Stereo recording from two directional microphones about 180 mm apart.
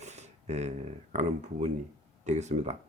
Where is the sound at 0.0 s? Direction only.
40° right (ahead or behind).